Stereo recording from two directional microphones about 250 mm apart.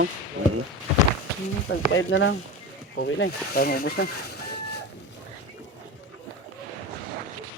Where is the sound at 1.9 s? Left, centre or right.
Left.